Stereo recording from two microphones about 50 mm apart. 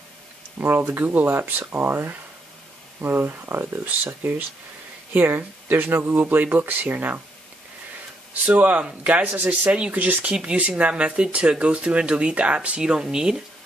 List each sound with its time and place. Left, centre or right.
0.6 s speech: right
1.0 s speech: right
8.5 s speech: right; by 13.4 s centre